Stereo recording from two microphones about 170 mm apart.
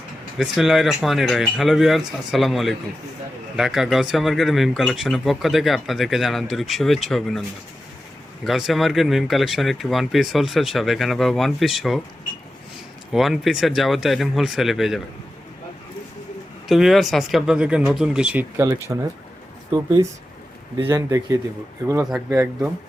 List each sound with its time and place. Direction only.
0.3 s speech: 5° right (ahead or behind)
8.4 s speech: centre (ahead or behind)
13.1 s speech: centre (ahead or behind)
16.6 s speech: centre (ahead or behind); by 22.0 s 20° right (ahead or behind)